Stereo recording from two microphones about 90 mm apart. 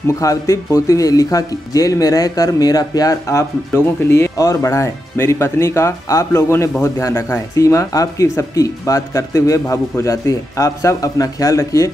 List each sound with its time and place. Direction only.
0.1 s speech: 35° left (ahead or behind)